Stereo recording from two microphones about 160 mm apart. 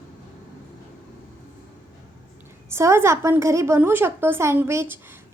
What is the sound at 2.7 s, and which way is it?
A woman's voice, 15° right (ahead or behind).